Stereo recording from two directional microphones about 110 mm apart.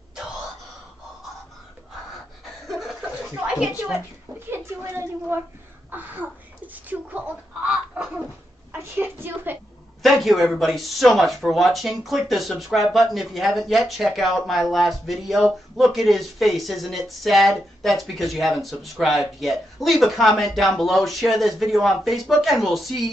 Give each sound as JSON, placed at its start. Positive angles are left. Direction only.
{"t": 3.3, "sound": "a woman's voice", "side_deg": -5}
{"t": 4.5, "sound": "speech", "side_deg": -20}
{"t": 5.9, "sound": "a sound", "side_deg": -15}
{"t": 6.7, "sound": "a woman's voice", "side_deg": -15}
{"t": 8.7, "sound": "a woman's voice", "side_deg": -20}
{"t": 10.0, "sound": "speech", "side_deg": 0}